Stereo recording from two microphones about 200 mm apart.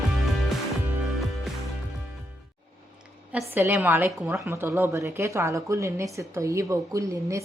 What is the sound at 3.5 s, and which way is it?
A woman's voice, 10° right (ahead or behind).